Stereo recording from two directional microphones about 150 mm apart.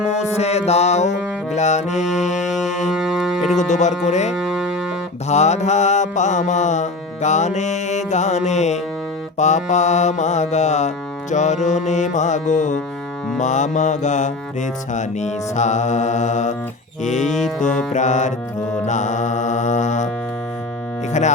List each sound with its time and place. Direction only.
0.1 s music: 45° left (ahead or behind)
2.5 s music: centre (ahead or behind)
3.5 s music: 50° left (ahead or behind)
4.4 s music: 5° right (ahead or behind)
5.3 s music: 50° left (ahead or behind)
21.1 s speech: 50° left (ahead or behind)